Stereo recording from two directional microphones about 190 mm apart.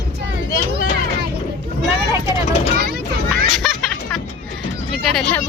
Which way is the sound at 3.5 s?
Centre (ahead or behind).